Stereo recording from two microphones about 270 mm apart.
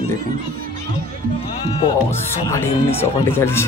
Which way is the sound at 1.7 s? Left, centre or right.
Left.